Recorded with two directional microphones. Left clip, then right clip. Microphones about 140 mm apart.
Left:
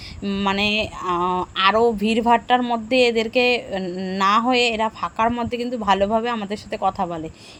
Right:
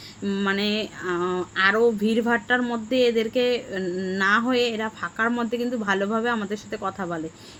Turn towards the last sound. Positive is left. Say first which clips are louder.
# left 6 dB
turn(degrees=15)  # may be behind; listen again after turning